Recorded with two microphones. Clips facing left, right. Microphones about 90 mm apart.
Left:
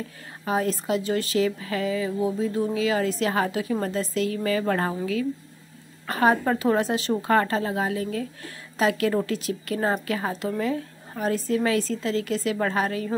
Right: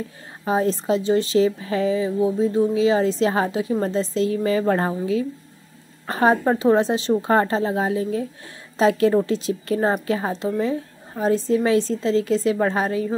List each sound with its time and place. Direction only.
0.5 s speech: 25° right (ahead or behind)